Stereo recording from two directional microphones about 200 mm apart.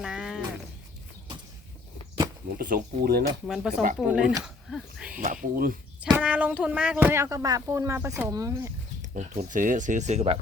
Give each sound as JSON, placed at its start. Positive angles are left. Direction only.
{"t": 0.0, "sound": "a sound", "side_deg": -5}
{"t": 2.6, "sound": "speech", "side_deg": -45}
{"t": 3.4, "sound": "speech", "side_deg": 0}
{"t": 5.2, "sound": "speech", "side_deg": -40}
{"t": 6.1, "sound": "speech", "side_deg": -10}
{"t": 9.0, "sound": "speech", "side_deg": -40}